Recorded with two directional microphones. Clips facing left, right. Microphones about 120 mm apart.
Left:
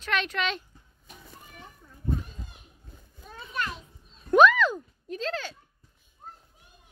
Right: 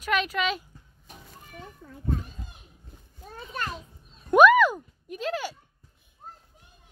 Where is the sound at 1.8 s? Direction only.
90° right.